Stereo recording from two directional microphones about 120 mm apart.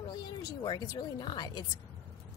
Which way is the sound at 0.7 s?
35° left (ahead or behind).